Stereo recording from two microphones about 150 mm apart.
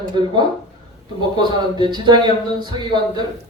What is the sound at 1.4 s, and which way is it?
A woman's voice, 30° right (ahead or behind).